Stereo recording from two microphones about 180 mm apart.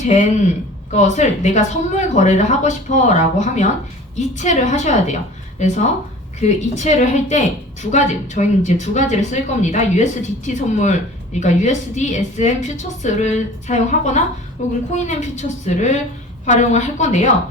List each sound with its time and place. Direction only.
0.0 s a woman's voice: 40° left (ahead or behind)